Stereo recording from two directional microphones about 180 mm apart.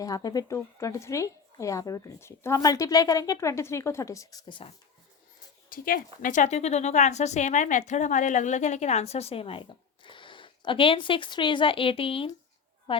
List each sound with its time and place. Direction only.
0.0 s a woman's voice: 20° left (ahead or behind)
5.6 s a woman's voice: 50° left (ahead or behind); by 13.0 s 25° left (ahead or behind)